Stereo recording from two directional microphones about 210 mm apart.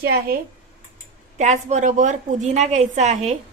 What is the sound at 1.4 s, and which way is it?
A woman's voice, 35° right (ahead or behind).